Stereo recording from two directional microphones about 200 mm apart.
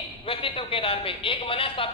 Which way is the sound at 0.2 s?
30° left (ahead or behind).